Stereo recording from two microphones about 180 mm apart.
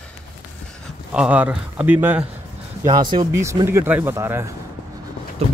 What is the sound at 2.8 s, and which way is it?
Speech, 25° right (ahead or behind).